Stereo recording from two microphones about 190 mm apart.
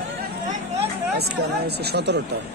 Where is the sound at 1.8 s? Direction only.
60° right (ahead or behind).